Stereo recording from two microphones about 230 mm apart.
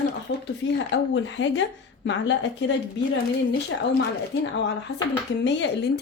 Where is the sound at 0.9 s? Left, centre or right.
Left.